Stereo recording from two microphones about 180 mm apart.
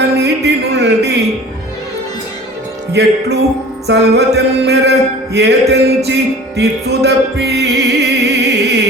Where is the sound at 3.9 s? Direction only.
70° right (ahead or behind).